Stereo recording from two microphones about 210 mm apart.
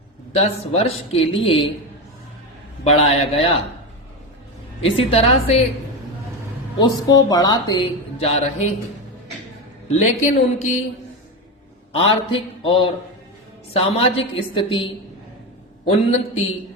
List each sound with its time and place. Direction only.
0.3 s a woman's voice: 30° left (ahead or behind)
2.8 s a woman's voice: 30° left (ahead or behind)
4.8 s a woman's voice: 30° left (ahead or behind)
6.7 s a woman's voice: 20° left (ahead or behind)
10.2 s a man's voice: 35° left (ahead or behind)
11.9 s a woman's voice: 25° left (ahead or behind)
15.9 s a man's voice: 30° left (ahead or behind)